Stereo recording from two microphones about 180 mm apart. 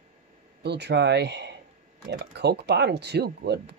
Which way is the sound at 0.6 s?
70° right (ahead or behind).